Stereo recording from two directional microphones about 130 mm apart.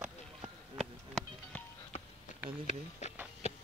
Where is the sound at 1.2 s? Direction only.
Centre (ahead or behind).